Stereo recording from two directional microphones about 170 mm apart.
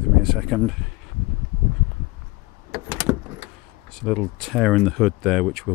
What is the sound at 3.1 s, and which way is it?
Power windows, 35° right (ahead or behind).